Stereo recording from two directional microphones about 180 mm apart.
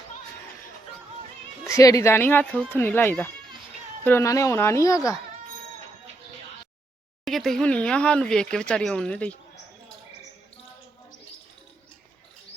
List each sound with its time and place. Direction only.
1.6 s speech: 20° left (ahead or behind)
7.3 s speech: centre (ahead or behind)